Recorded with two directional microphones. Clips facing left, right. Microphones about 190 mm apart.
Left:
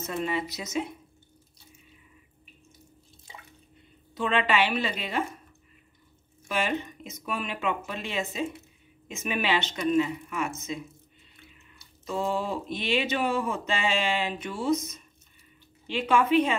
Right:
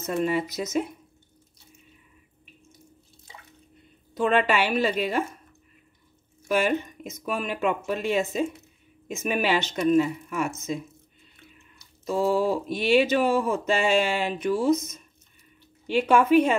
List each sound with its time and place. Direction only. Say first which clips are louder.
0.2 s speech: right 6 dB; 45° right (ahead or behind)
4.1 s speech: right 4 dB; 45° right (ahead or behind)
6.5 s speech: right 5 dB; 45° right (ahead or behind)
12.4 s speech: right 6 dB; 45° right (ahead or behind)
15.9 s speech: right 4 dB; 45° right (ahead or behind)